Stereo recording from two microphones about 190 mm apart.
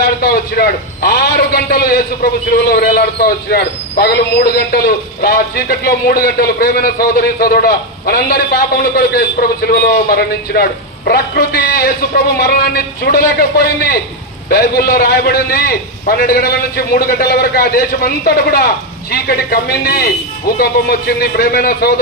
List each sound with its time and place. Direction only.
0.2 s a man's voice: 55° left (ahead or behind)
14.5 s a man's voice: 55° left (ahead or behind)